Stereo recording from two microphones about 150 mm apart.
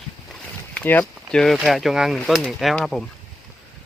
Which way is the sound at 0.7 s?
10° left (ahead or behind).